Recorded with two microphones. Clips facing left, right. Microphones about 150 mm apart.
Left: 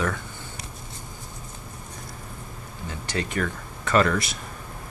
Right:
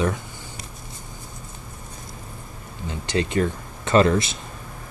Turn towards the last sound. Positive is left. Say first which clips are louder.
# right 4 dB
turn(degrees=-25)  # may be behind; listen again after turning